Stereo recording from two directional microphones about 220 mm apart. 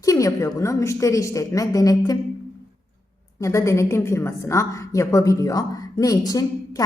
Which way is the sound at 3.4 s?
15° left (ahead or behind).